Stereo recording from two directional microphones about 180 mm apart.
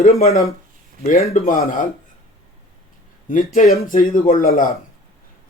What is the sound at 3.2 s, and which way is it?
Speech, 50° left (ahead or behind).